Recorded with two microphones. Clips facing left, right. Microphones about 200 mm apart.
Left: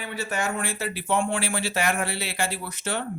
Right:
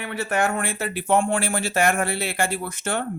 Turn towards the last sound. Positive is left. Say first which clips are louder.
# right 4 dB
turn(degrees=-50)  # may be behind; listen again after turning